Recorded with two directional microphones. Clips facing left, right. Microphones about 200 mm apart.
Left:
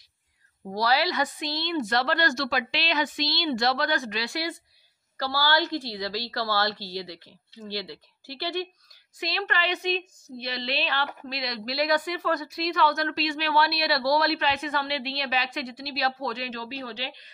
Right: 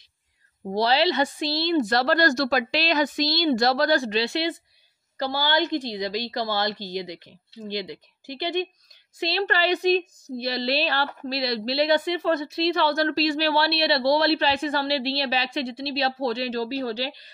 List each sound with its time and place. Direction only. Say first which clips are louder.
0.7 s a woman's voice: right 4 dB; 25° right (ahead or behind)
9.2 s speech: right 6 dB; 30° right (ahead or behind)